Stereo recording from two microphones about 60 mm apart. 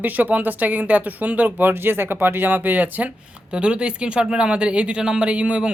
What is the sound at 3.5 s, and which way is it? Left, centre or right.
Speech, centre.